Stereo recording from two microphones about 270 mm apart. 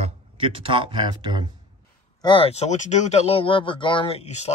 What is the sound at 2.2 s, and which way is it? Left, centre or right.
Speech, centre.